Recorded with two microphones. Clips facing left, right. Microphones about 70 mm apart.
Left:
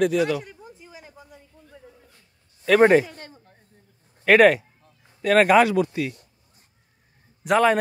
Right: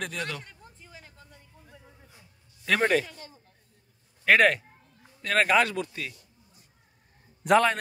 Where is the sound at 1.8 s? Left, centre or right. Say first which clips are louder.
Left 5 dB; centre.